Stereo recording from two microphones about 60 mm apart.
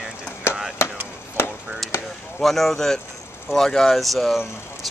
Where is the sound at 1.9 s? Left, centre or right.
Left.